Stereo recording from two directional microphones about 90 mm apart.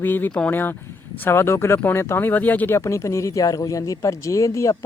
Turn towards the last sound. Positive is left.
turn(degrees=35)  # may be behind; listen again after turning